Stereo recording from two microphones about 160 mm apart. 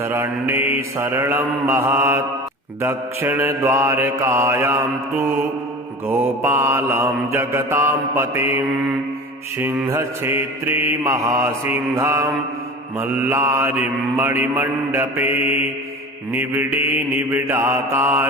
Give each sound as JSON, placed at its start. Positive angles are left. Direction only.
{"t": 0.0, "sound": "mantra", "side_deg": -15}